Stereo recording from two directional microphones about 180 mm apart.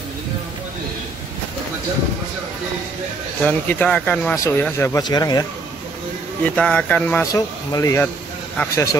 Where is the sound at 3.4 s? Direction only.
10° left (ahead or behind).